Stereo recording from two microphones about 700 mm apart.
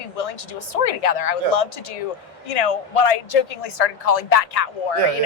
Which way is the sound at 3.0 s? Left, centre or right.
Left.